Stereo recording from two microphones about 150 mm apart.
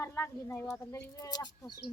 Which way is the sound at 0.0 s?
15° left (ahead or behind).